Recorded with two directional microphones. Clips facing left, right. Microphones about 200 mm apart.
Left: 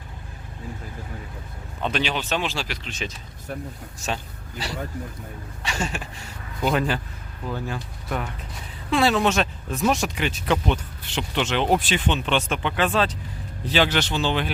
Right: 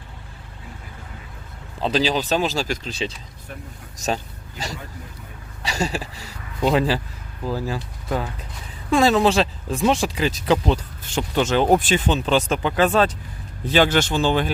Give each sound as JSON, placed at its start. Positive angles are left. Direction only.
{"t": 1.8, "sound": "speech", "side_deg": -35}
{"t": 5.6, "sound": "a sound", "side_deg": -35}
{"t": 6.6, "sound": "speech", "side_deg": -30}